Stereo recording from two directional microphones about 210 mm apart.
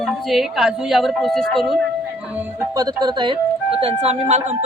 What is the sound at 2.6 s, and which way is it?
Speech, 20° right (ahead or behind).